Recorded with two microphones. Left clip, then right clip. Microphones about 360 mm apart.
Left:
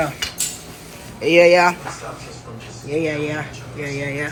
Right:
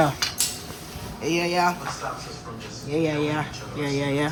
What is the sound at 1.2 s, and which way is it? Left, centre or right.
Speech, centre.